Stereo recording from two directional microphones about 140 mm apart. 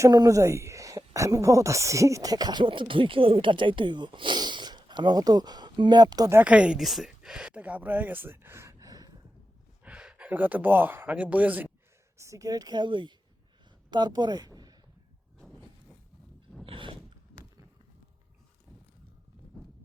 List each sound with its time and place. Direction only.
0.0 s speech: 25° right (ahead or behind)
6.3 s speech: 10° right (ahead or behind); by 9.1 s 25° right (ahead or behind)
9.8 s speech: 5° right (ahead or behind); by 14.8 s 30° right (ahead or behind)
16.6 s a sound: 35° right (ahead or behind)